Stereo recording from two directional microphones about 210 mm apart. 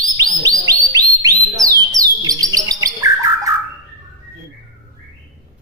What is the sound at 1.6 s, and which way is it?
Bird, 15° right (ahead or behind).